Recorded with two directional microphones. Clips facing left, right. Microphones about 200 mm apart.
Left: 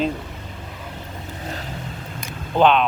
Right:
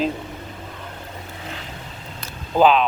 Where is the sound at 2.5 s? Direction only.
5° right (ahead or behind).